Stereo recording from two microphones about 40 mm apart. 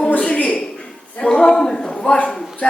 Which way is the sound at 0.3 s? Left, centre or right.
Left.